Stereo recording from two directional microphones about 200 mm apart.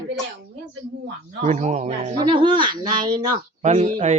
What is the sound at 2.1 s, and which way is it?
A woman's voice, 25° right (ahead or behind).